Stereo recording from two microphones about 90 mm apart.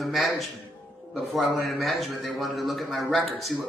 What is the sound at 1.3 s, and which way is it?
A man's voice, centre (ahead or behind).